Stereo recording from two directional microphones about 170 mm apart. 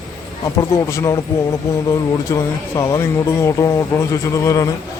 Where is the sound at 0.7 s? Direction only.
15° left (ahead or behind).